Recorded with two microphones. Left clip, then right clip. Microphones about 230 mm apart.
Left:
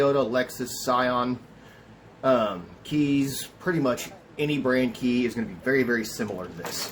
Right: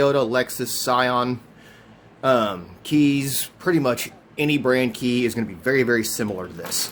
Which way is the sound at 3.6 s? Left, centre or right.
Right.